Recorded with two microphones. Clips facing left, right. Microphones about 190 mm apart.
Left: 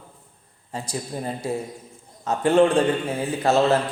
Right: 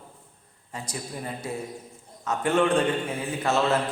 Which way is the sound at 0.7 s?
30° left (ahead or behind).